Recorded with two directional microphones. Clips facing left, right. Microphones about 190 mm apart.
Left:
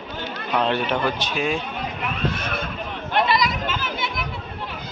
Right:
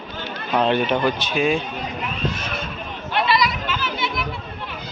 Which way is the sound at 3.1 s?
50° left (ahead or behind).